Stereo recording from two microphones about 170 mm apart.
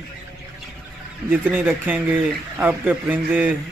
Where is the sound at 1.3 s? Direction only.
10° right (ahead or behind).